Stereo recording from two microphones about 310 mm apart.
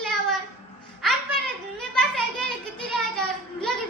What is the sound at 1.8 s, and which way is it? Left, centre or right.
Children playing, centre.